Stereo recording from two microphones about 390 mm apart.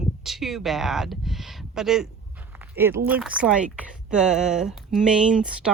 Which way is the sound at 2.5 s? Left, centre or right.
Centre.